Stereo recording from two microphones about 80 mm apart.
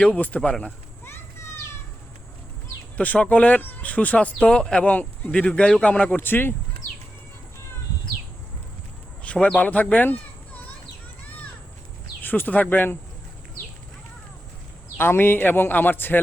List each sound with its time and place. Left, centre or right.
0.0 s speech: centre
3.0 s speech: centre
9.2 s a sound: centre
9.6 s speech: centre
12.2 s speech: left
14.9 s speech: left